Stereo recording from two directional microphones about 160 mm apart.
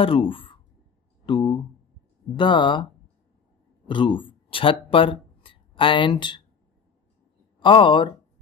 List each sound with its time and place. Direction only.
0.0 s speech: 35° left (ahead or behind)
7.6 s speech: 30° left (ahead or behind)